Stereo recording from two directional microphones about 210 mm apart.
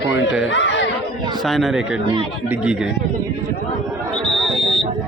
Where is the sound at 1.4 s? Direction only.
Centre (ahead or behind).